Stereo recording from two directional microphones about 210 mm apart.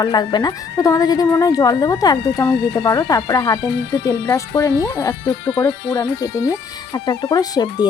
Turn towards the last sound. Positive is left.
turn(degrees=20)  # may be behind; listen again after turning